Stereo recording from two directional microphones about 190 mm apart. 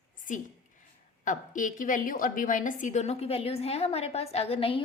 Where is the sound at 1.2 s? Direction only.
45° left (ahead or behind).